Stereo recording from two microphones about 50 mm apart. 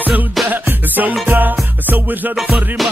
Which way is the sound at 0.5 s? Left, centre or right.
Right.